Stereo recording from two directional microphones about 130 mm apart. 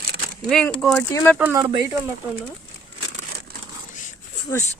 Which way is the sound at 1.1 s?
25° left (ahead or behind).